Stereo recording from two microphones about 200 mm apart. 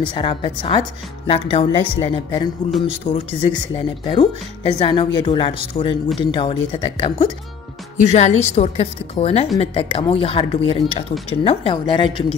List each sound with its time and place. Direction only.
0.1 s speech: 25° left (ahead or behind)
8.0 s a woman's voice: 35° left (ahead or behind)